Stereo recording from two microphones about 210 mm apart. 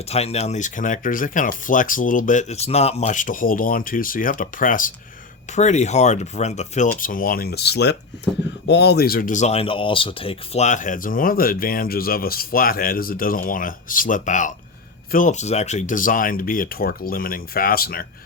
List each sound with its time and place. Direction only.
0.1 s speech: 30° left (ahead or behind)